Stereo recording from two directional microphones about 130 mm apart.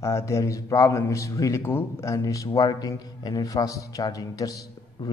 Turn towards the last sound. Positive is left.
turn(degrees=30)  # may be behind; listen again after turning